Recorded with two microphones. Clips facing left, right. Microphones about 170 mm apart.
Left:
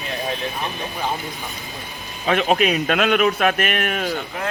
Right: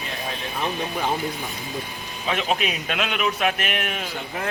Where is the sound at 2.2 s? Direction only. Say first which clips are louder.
Left 6 dB; 50° left (ahead or behind).